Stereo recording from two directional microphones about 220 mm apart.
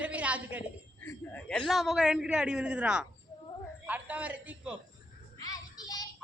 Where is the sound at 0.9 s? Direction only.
10° left (ahead or behind); by 4.8 s 5° right (ahead or behind).